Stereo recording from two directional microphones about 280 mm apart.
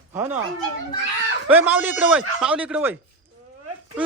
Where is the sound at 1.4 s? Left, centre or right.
Centre.